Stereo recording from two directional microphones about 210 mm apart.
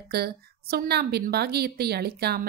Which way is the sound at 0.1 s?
45° right (ahead or behind).